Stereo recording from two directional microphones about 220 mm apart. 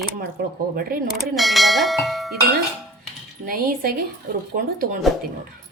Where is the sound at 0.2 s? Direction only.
45° right (ahead or behind).